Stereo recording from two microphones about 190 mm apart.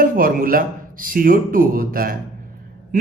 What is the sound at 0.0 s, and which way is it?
Speech, 50° right (ahead or behind).